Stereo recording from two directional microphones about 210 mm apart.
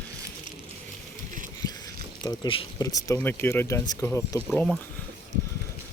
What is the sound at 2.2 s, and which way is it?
Speech, 20° left (ahead or behind).